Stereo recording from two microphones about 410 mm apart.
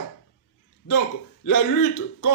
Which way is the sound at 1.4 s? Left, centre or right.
Left.